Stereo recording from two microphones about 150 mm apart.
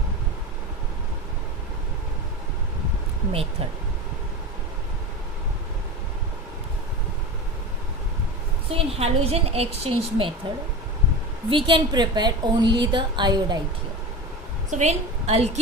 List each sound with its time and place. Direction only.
8.7 s a woman's voice: 40° right (ahead or behind)
11.4 s a woman's voice: 35° right (ahead or behind)
14.7 s a woman's voice: 50° right (ahead or behind)